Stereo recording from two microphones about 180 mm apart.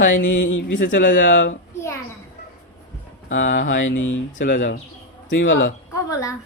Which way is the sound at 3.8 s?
90° left.